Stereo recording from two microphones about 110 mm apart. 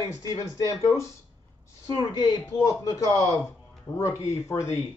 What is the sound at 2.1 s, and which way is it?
Speech, 40° left (ahead or behind).